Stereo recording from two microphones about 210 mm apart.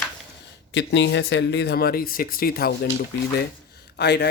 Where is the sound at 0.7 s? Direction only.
55° left (ahead or behind).